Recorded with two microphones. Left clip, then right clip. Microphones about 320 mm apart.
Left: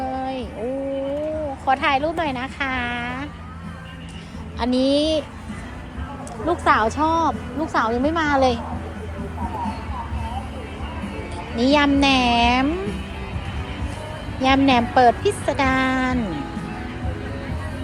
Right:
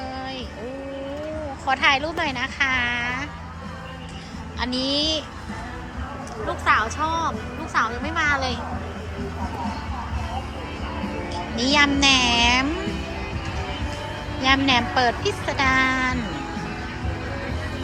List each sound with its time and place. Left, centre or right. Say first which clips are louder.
0.0 s a sound: left 5 dB; centre
1.6 s speech: even; centre
4.9 s speech: left 3 dB; centre
6.5 s speech: left 3 dB; centre
11.5 s speech: left 2 dB; centre
14.4 s speech: left 2 dB; centre